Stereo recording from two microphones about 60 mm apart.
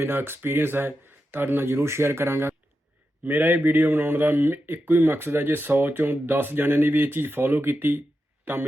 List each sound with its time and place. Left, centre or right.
0.0 s speech: right
3.2 s speech: right